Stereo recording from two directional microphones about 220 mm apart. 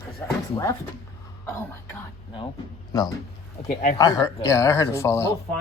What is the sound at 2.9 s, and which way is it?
Speech, 15° left (ahead or behind).